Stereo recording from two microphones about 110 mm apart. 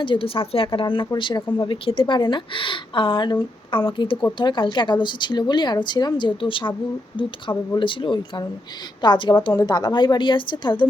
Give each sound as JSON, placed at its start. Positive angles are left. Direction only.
{"t": 0.0, "sound": "a woman's voice", "side_deg": 50}
{"t": 7.8, "sound": "a woman's voice", "side_deg": 50}
{"t": 9.6, "sound": "a woman's voice", "side_deg": 40}